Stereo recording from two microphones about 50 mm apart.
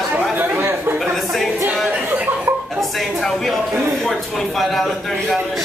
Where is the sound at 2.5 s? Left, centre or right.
Right.